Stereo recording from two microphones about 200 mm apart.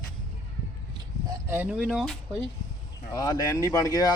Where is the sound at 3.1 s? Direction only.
20° left (ahead or behind).